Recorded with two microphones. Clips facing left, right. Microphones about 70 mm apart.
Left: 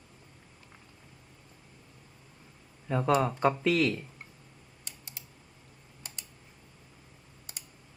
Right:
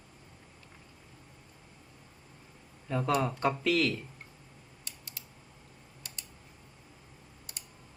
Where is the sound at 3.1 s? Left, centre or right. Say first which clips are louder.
Left 3 dB; centre.